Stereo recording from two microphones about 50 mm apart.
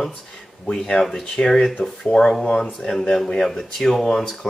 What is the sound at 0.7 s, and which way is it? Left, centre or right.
Speech, centre.